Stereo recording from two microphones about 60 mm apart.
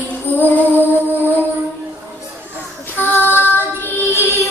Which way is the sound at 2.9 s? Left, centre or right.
Left.